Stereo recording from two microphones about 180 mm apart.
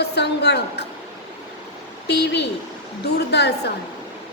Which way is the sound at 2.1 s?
70° left (ahead or behind).